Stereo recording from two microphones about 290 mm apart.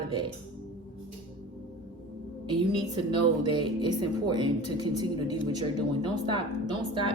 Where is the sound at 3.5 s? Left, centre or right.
Centre.